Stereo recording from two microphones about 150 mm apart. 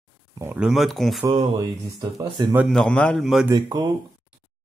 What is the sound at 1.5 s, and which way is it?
Speech, 25° right (ahead or behind).